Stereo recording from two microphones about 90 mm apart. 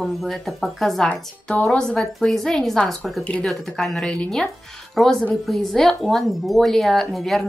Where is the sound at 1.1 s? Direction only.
15° left (ahead or behind).